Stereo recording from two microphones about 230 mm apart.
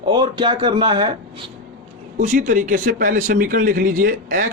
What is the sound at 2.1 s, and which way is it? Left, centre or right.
A man's voice, right.